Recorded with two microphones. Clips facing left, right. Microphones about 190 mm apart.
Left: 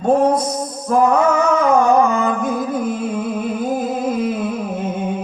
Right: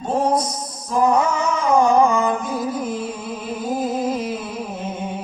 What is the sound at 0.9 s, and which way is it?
Music, 60° left (ahead or behind).